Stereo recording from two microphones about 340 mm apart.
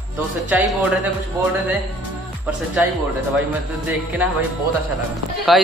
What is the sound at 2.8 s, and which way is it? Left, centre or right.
Speech, centre.